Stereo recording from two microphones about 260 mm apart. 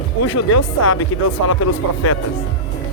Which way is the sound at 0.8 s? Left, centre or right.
Left.